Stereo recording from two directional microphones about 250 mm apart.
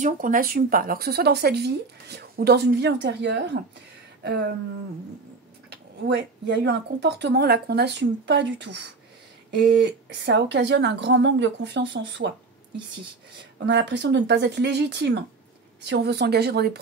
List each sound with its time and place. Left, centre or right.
0.0 s speech: right
4.2 s a sound: right
5.7 s speech: right
12.7 s speech: centre
13.7 s speech: right